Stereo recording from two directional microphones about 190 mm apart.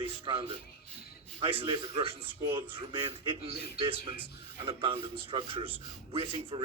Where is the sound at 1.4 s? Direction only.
30° right (ahead or behind).